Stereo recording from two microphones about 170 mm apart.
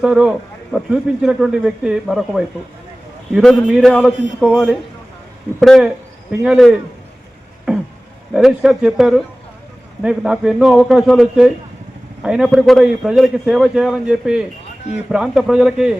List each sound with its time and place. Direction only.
0.0 s speech: 5° right (ahead or behind)
7.7 s beatboxing: 5° right (ahead or behind)
8.3 s speech: 5° right (ahead or behind)